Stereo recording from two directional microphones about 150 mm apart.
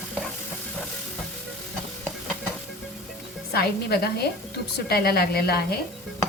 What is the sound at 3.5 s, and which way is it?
A woman's voice, 90° left.